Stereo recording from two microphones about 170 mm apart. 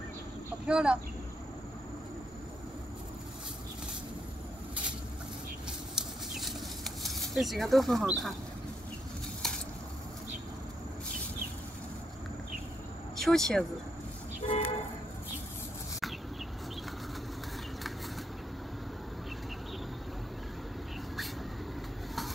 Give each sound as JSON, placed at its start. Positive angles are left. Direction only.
{"t": 0.7, "sound": "speech", "side_deg": -5}
{"t": 5.7, "sound": "chicken", "side_deg": 0}
{"t": 7.0, "sound": "speech", "side_deg": 0}
{"t": 13.2, "sound": "speech", "side_deg": 5}
{"t": 14.4, "sound": "vehicle", "side_deg": 35}